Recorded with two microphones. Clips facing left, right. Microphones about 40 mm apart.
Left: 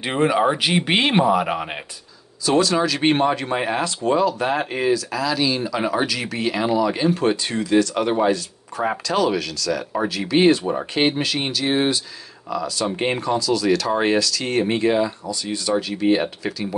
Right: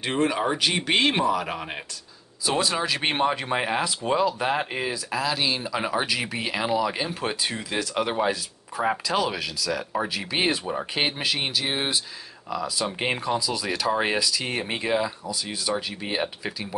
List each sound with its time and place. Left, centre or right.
0.0 s speech: centre
2.4 s speech: centre
3.0 s speech: centre
4.9 s speech: centre
10.7 s speech: centre